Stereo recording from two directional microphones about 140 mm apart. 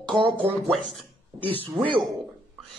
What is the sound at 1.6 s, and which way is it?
Speech, 35° right (ahead or behind).